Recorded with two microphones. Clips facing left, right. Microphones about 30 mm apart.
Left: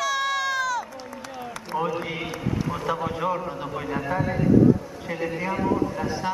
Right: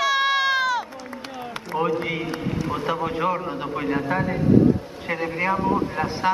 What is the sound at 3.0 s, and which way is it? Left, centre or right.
A man's voice, right.